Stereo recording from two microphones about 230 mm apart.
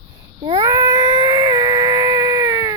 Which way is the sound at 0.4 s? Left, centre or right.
Centre.